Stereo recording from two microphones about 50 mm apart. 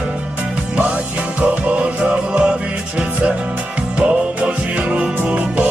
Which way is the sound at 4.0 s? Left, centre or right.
Right.